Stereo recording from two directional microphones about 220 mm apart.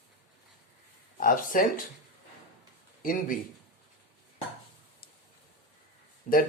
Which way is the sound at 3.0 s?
40° left (ahead or behind).